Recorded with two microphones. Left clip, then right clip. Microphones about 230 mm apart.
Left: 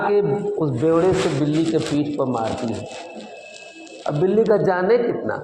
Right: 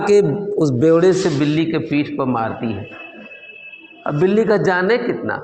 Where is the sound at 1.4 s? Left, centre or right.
Right.